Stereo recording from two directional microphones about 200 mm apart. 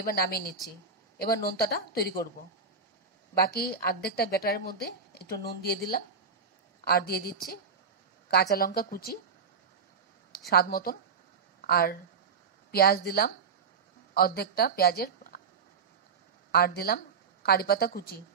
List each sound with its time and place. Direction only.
0.0 s a woman's voice: 50° left (ahead or behind)
3.3 s a woman's voice: 50° left (ahead or behind)
6.8 s a woman's voice: 50° left (ahead or behind)
10.5 s a woman's voice: 50° left (ahead or behind)
16.5 s a woman's voice: 50° left (ahead or behind)